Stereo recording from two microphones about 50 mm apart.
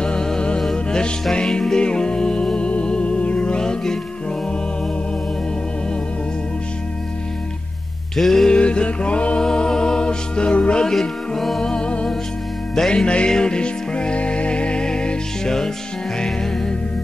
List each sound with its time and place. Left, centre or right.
0.0 s music: centre
0.6 s music: centre
8.2 s music: centre
8.5 s music: left
9.4 s music: centre
11.0 s music: centre
11.6 s music: centre